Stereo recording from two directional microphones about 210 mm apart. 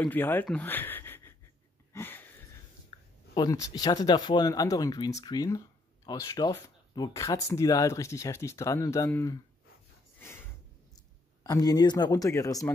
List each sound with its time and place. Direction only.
0.0 s speech: 10° left (ahead or behind)
2.0 s a sound: 10° left (ahead or behind)
2.9 s a sound: 25° left (ahead or behind)
3.3 s speech: 15° left (ahead or behind)
10.2 s snort: 10° left (ahead or behind)
11.4 s speech: 20° left (ahead or behind)